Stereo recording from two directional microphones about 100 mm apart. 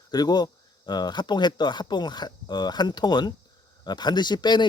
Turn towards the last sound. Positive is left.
turn(degrees=45)  # may be behind; listen again after turning